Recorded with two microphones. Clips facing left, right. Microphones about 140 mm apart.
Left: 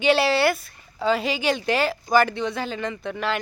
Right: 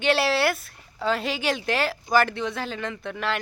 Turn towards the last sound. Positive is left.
turn(degrees=0)  # may be behind; listen again after turning